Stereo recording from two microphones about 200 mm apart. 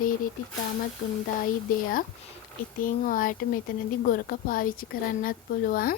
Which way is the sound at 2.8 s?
45° left (ahead or behind).